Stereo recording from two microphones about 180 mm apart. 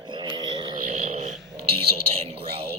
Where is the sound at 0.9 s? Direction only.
40° right (ahead or behind).